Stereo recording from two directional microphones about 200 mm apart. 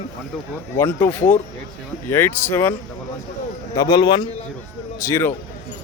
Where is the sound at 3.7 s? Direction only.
20° left (ahead or behind).